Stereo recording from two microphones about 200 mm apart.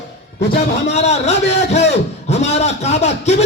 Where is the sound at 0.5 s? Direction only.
35° left (ahead or behind).